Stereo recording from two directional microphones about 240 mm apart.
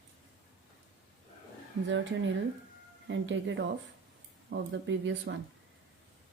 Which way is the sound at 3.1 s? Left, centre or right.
Right.